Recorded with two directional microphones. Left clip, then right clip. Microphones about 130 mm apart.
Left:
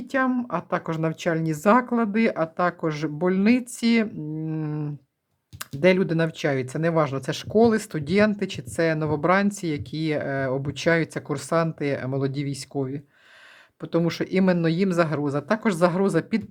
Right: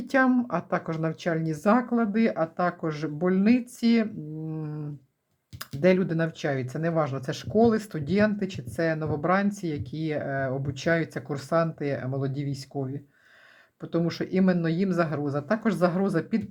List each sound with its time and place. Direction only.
0.1 s speech: centre (ahead or behind)
0.4 s speech: 15° left (ahead or behind)
0.9 s speech: 30° left (ahead or behind)